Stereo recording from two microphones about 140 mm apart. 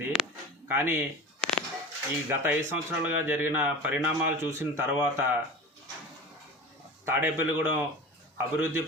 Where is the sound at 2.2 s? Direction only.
15° right (ahead or behind).